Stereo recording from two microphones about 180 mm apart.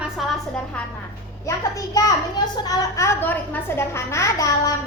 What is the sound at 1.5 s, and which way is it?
A woman's voice, 15° left (ahead or behind).